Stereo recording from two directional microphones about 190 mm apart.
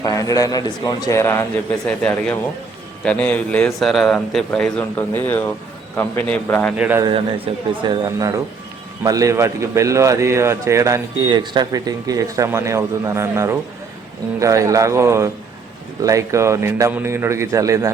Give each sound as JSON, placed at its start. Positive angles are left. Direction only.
{"t": 0.0, "sound": "a man's voice", "side_deg": 15}
{"t": 6.7, "sound": "a man's voice", "side_deg": -10}
{"t": 7.0, "sound": "a man's voice", "side_deg": -25}